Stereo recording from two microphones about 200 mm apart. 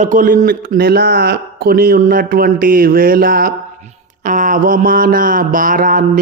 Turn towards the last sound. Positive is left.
turn(degrees=-40)  # may be behind; listen again after turning